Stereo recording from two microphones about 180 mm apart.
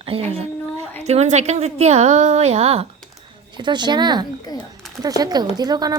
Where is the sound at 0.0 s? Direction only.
30° right (ahead or behind).